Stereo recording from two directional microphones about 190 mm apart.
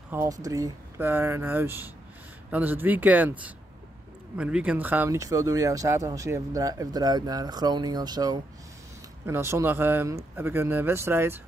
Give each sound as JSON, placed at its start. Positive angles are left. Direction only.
{"t": 0.1, "sound": "speech", "side_deg": -15}